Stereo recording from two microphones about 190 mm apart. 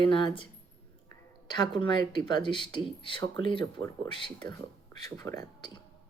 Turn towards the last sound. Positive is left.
turn(degrees=20)  # may be behind; listen again after turning